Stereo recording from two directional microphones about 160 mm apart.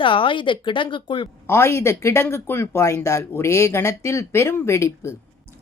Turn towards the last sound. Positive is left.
turn(degrees=15)  # may be behind; listen again after turning